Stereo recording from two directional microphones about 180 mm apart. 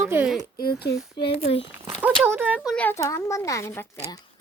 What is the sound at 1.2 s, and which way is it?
Speech, 35° left (ahead or behind).